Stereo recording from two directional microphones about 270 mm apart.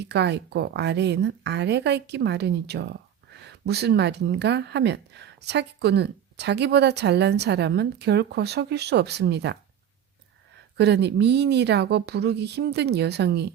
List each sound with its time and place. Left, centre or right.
0.0 s a woman's voice: right
10.8 s a woman's voice: right